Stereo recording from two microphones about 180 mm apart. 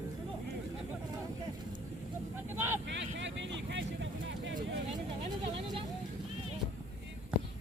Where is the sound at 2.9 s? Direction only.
80° right.